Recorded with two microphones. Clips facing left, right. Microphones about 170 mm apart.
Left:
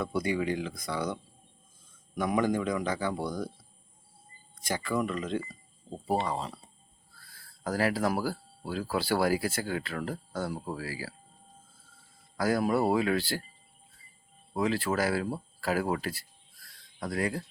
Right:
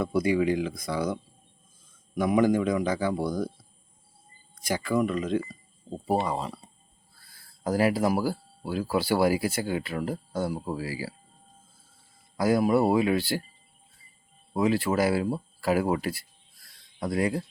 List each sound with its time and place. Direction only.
0.0 s speech: 10° right (ahead or behind)
4.7 s speech: 10° right (ahead or behind)
7.6 s speech: 20° right (ahead or behind)
12.4 s speech: 15° right (ahead or behind)
14.5 s speech: 15° right (ahead or behind)